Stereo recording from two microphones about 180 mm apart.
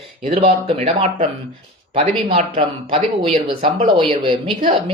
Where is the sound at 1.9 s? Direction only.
30° right (ahead or behind).